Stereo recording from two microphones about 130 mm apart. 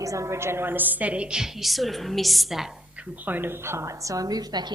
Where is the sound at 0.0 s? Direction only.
25° right (ahead or behind); by 2.7 s centre (ahead or behind).